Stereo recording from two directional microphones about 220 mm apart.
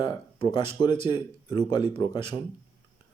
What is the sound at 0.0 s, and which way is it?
Speech, 20° left (ahead or behind).